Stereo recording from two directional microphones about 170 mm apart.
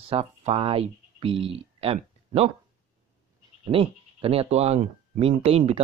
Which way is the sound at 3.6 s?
35° right (ahead or behind).